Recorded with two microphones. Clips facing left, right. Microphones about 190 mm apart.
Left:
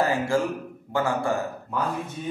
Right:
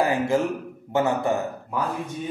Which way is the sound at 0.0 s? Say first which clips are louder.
Right 2 dB; 15° right (ahead or behind).